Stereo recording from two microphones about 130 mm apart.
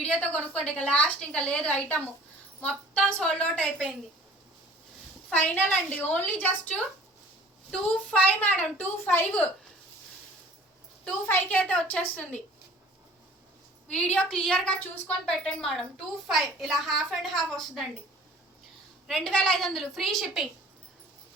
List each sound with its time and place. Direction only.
0.0 s a woman's voice: 10° left (ahead or behind)
5.3 s a woman's voice: 15° left (ahead or behind)
11.3 s a woman's voice: 15° left (ahead or behind)
13.8 s a woman's voice: 5° left (ahead or behind)
19.0 s a woman's voice: 5° left (ahead or behind)